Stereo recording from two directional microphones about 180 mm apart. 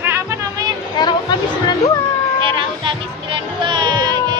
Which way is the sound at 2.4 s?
25° right (ahead or behind).